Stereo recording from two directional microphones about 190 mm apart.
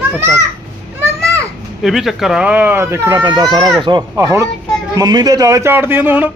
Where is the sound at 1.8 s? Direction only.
Centre (ahead or behind).